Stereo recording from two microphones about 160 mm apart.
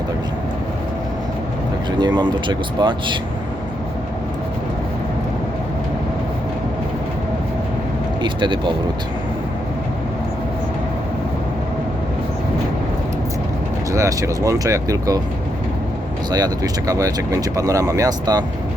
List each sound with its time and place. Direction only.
2.0 s speech: 25° right (ahead or behind)
8.2 s speech: 30° right (ahead or behind)
13.9 s speech: 20° right (ahead or behind)
16.3 s speech: 25° right (ahead or behind)